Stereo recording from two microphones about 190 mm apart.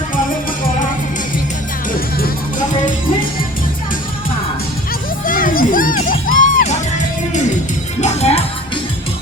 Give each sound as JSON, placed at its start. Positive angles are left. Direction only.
{"t": 1.9, "sound": "music", "side_deg": 45}
{"t": 5.2, "sound": "music", "side_deg": 45}
{"t": 6.3, "sound": "music", "side_deg": -80}
{"t": 8.0, "sound": "music", "side_deg": 35}